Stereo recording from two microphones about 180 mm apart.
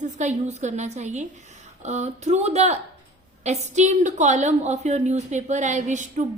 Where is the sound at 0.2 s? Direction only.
40° right (ahead or behind).